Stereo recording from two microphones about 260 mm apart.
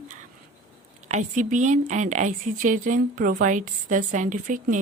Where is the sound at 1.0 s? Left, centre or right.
Right.